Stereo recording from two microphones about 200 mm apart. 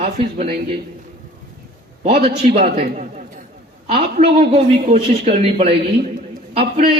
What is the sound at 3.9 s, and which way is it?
A man's voice, 30° right (ahead or behind).